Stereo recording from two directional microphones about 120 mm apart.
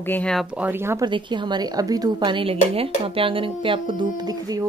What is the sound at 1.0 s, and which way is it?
A woman's voice, 40° right (ahead or behind).